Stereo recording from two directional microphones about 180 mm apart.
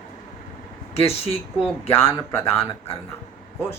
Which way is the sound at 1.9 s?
15° left (ahead or behind).